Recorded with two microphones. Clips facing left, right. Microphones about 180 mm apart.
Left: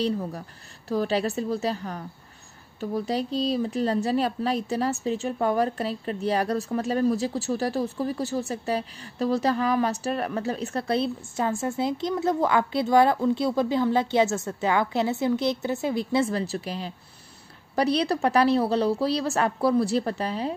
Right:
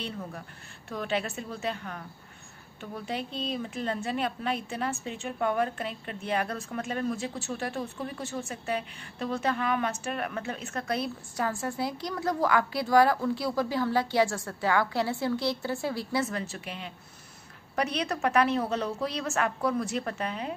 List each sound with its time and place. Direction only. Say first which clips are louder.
0.8 s a woman's voice: left 7 dB; 35° left (ahead or behind)